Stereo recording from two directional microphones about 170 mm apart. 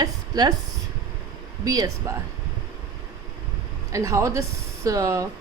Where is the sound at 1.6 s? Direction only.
20° right (ahead or behind).